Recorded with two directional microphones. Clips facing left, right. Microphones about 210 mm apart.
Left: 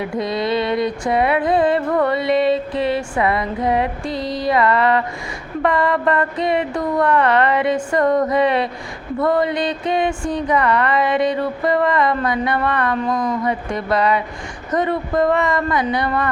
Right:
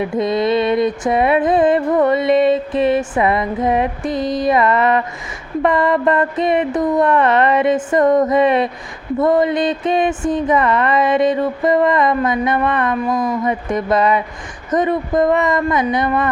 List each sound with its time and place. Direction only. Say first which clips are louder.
0.0 s music: right 4 dB; 20° right (ahead or behind)
5.6 s speech: right 3 dB; 20° right (ahead or behind)